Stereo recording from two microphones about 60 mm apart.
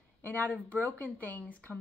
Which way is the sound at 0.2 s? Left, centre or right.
Left.